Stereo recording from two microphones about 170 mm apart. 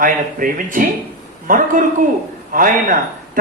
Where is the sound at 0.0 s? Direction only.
55° right (ahead or behind).